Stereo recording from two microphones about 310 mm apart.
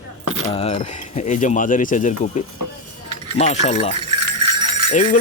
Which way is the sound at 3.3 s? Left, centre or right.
Left.